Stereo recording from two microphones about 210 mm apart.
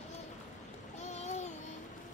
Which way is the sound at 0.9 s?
35° left (ahead or behind).